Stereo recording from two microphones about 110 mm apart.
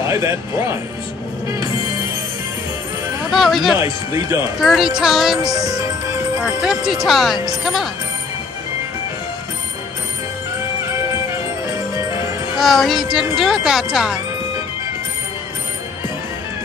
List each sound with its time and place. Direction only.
0.0 s speech: 25° right (ahead or behind)
3.3 s speech: centre (ahead or behind)
3.8 s speech: 30° right (ahead or behind)
4.6 s speech: centre (ahead or behind)
5.4 s music: 35° right (ahead or behind)
6.4 s speech: 5° right (ahead or behind)
12.5 s speech: centre (ahead or behind)